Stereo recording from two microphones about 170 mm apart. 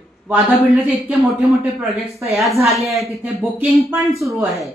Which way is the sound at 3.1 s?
5° right (ahead or behind).